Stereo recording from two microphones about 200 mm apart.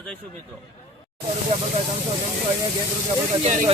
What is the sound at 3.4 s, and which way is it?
Speech, 40° right (ahead or behind).